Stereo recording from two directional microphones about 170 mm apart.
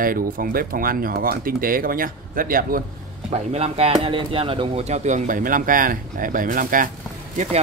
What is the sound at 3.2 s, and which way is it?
Speech, 40° right (ahead or behind).